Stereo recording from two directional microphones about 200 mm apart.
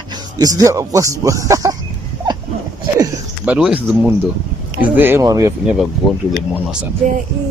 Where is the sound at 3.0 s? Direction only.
5° right (ahead or behind).